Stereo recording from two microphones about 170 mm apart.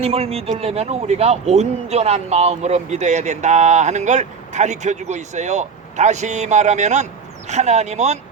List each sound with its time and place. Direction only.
0.0 s speech: 35° right (ahead or behind)